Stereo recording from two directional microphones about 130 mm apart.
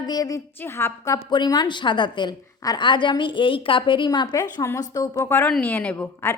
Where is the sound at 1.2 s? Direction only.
35° left (ahead or behind).